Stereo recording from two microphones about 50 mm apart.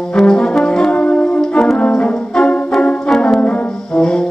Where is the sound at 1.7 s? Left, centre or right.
Centre.